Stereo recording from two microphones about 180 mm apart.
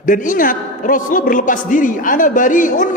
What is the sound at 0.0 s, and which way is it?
A man's voice, 45° left (ahead or behind).